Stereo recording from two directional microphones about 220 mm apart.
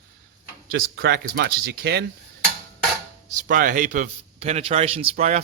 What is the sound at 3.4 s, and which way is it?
A man's voice, 35° right (ahead or behind).